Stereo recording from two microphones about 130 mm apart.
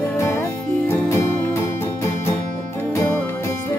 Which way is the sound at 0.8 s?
20° left (ahead or behind).